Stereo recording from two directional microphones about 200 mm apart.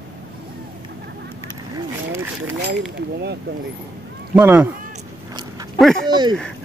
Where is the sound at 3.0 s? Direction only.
55° right (ahead or behind).